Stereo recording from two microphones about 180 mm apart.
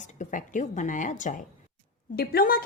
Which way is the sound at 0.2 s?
45° left (ahead or behind).